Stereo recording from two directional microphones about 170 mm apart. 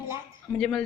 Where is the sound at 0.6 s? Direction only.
5° left (ahead or behind).